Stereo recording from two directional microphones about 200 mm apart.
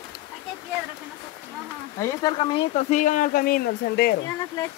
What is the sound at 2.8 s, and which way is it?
Speech, 40° left (ahead or behind).